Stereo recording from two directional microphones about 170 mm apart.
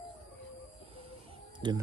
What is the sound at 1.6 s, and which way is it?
Speech, 25° right (ahead or behind).